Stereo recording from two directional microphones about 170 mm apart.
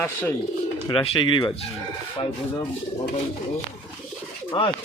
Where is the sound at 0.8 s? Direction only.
30° left (ahead or behind).